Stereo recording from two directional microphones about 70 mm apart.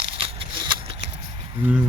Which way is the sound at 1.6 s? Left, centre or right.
Centre.